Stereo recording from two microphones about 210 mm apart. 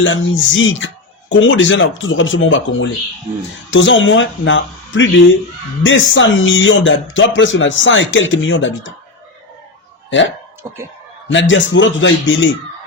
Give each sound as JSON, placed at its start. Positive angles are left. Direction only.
{"t": 0.0, "sound": "speech", "side_deg": 65}
{"t": 11.3, "sound": "speech", "side_deg": 65}